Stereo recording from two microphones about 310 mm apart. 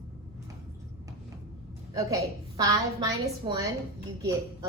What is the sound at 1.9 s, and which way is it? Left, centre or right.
A woman's voice, centre.